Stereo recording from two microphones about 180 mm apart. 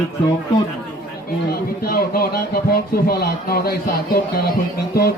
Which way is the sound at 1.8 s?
55° left (ahead or behind).